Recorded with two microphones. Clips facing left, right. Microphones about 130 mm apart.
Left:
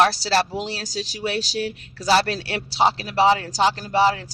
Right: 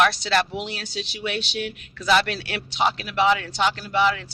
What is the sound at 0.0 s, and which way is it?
Speech, 35° left (ahead or behind).